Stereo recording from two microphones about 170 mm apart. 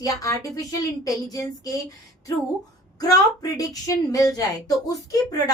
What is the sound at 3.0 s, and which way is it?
A woman's voice, 20° left (ahead or behind).